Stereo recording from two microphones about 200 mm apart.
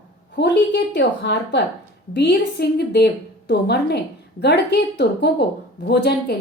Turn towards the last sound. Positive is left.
turn(degrees=55)  # may be behind; listen again after turning